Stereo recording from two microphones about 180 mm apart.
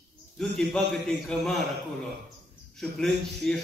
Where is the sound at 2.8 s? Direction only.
Centre (ahead or behind).